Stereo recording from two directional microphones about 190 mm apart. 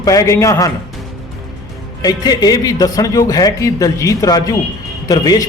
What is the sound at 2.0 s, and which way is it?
A man's voice, 20° left (ahead or behind).